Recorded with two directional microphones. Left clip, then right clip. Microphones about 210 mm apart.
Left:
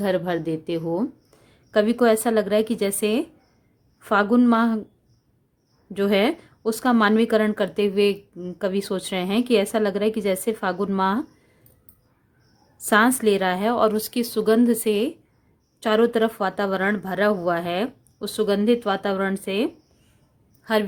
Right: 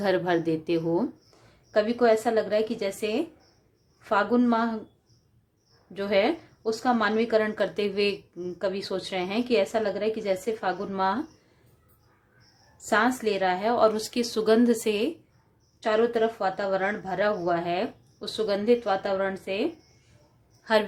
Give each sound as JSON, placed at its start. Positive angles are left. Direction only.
{"t": 0.0, "sound": "a woman's voice", "side_deg": 30}
{"t": 5.9, "sound": "a woman's voice", "side_deg": 40}
{"t": 12.9, "sound": "a woman's voice", "side_deg": 40}